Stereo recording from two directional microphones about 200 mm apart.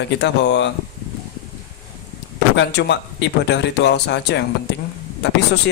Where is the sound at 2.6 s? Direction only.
60° left (ahead or behind).